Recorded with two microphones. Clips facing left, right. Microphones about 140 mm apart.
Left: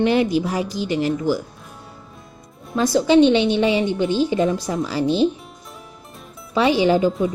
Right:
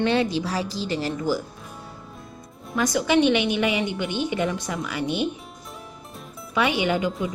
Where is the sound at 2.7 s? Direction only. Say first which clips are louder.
Left 6 dB; 25° left (ahead or behind).